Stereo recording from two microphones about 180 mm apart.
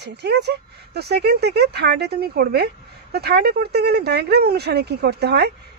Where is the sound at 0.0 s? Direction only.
65° right (ahead or behind).